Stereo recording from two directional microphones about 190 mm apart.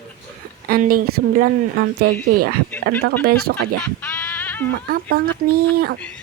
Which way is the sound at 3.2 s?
55° right (ahead or behind).